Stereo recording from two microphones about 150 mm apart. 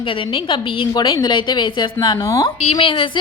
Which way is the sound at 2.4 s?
35° left (ahead or behind).